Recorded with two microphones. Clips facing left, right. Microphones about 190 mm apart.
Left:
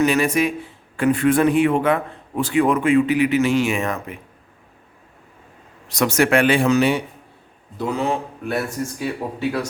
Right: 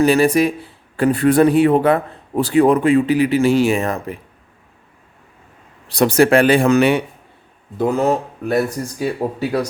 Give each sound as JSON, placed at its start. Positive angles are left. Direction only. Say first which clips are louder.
{"t": 0.0, "sound": "a man's voice", "louder": "right 4 dB", "side_deg": -35}
{"t": 5.9, "sound": "a man's voice", "louder": "right 5 dB", "side_deg": -35}
{"t": 6.7, "sound": "a man's voice", "louder": "right 4 dB", "side_deg": -60}
{"t": 7.8, "sound": "a man's voice", "louder": "right 6 dB", "side_deg": -45}